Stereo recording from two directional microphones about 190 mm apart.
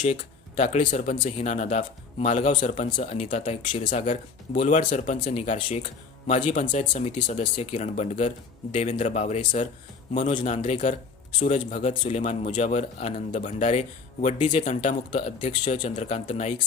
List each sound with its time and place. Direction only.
0.1 s speech: 35° left (ahead or behind)